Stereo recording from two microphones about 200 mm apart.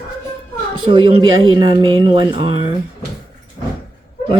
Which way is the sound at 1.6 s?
25° right (ahead or behind).